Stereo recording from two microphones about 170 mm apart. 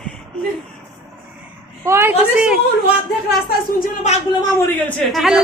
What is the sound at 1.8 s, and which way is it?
Speech, 15° right (ahead or behind).